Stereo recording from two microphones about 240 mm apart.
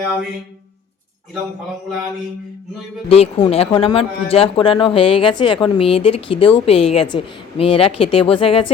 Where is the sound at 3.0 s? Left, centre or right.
Left.